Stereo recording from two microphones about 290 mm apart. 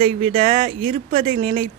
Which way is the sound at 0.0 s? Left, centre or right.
Right.